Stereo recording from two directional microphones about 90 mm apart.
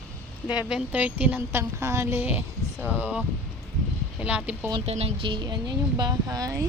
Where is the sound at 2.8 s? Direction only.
15° right (ahead or behind).